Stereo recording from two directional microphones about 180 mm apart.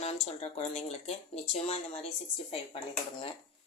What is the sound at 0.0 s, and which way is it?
A woman's voice, 35° left (ahead or behind).